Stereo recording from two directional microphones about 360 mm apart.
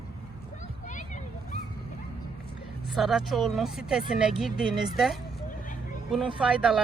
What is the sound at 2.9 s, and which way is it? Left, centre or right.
Speech, centre.